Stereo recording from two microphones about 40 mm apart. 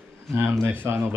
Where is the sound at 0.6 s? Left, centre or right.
Right.